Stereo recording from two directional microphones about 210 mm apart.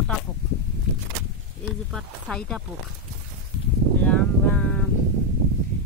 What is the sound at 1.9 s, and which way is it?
Speech, centre (ahead or behind).